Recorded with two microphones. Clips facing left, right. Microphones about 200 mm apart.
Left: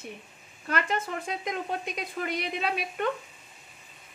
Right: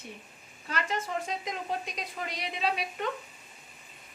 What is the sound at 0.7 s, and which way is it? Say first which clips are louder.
A woman's voice: left 3 dB; 55° left (ahead or behind).